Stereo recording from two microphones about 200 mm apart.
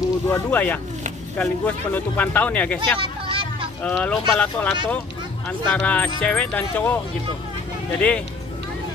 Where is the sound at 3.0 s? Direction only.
25° right (ahead or behind).